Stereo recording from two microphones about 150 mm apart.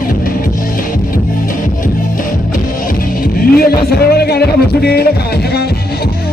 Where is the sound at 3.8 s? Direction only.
90° left.